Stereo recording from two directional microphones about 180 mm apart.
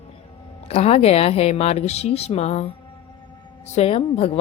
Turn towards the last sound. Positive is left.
turn(degrees=30)  # may be behind; listen again after turning